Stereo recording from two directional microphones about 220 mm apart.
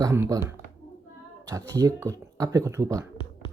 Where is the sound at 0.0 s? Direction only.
15° right (ahead or behind).